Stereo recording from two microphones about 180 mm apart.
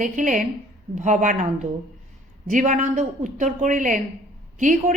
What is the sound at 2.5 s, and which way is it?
A woman's voice, 45° right (ahead or behind).